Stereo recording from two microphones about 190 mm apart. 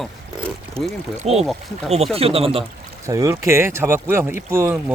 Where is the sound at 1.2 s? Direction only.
35° right (ahead or behind).